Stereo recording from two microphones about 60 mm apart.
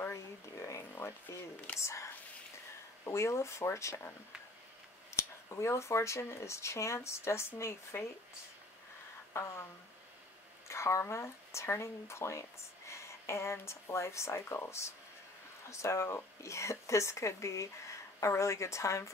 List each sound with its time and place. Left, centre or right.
0.1 s a sound: left
1.8 s speech: left
3.1 s speech: left
5.1 s speech: left
9.3 s speech: left
10.7 s speech: left